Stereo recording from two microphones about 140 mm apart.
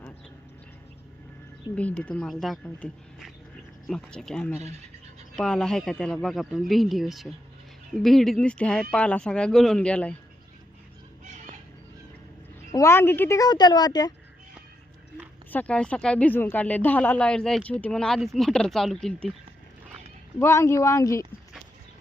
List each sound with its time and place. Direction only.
1.7 s speech: 10° left (ahead or behind)
12.7 s a child's voice: 20° left (ahead or behind)
15.4 s speech: 10° left (ahead or behind)
20.4 s a child's voice: 20° left (ahead or behind)